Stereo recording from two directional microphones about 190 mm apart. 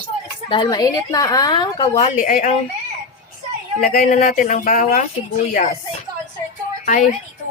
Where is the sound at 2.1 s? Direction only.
45° left (ahead or behind).